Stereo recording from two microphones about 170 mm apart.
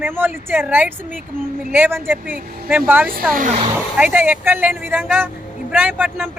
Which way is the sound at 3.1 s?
60° right (ahead or behind).